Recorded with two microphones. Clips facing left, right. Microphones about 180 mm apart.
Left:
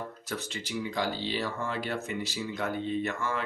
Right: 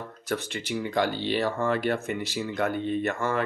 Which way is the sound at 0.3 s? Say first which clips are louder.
Right 9 dB; 60° right (ahead or behind).